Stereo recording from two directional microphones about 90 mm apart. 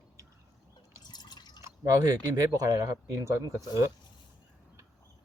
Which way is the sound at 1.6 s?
40° right (ahead or behind).